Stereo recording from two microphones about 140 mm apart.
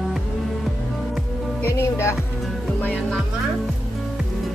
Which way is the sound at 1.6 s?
20° left (ahead or behind).